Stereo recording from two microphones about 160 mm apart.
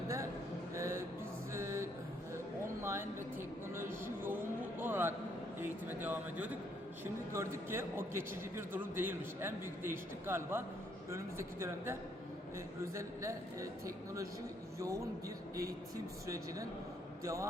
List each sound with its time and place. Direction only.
0.7 s music: 15° right (ahead or behind)
3.8 s a sound: 15° right (ahead or behind)
7.0 s a man's voice: 15° right (ahead or behind)
16.2 s a man's voice: 20° right (ahead or behind)